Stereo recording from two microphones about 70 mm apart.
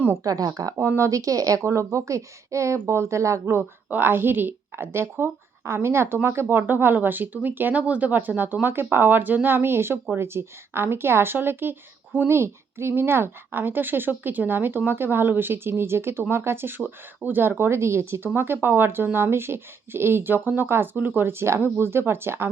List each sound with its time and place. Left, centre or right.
0.2 s speech: right
0.8 s speech: right
3.8 s a woman's voice: right